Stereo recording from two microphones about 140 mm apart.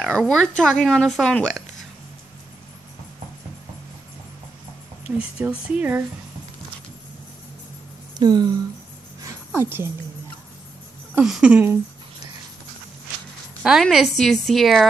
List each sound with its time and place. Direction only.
0.0 s speech: centre (ahead or behind)
5.4 s speech: 10° right (ahead or behind)
8.2 s speech: 30° right (ahead or behind)
9.2 s music: 15° right (ahead or behind)
11.1 s speech: 5° right (ahead or behind)
13.6 s speech: centre (ahead or behind)